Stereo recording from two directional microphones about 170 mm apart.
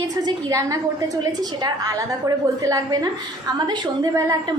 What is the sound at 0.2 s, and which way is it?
A woman's voice, 20° right (ahead or behind).